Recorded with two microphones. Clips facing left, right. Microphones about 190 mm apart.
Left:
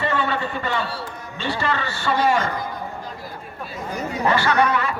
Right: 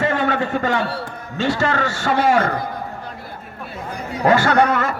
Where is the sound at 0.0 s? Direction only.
45° right (ahead or behind).